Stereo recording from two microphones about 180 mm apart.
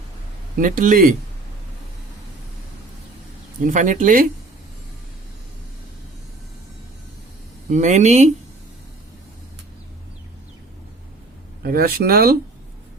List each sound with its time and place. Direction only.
0.6 s speech: 50° right (ahead or behind)
3.6 s speech: 45° right (ahead or behind)
7.7 s speech: 40° right (ahead or behind)
11.6 s speech: 55° right (ahead or behind)